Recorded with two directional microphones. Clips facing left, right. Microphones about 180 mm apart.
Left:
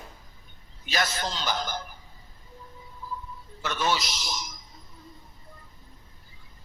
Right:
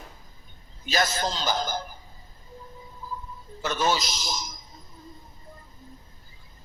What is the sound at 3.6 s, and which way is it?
Speech, 40° right (ahead or behind).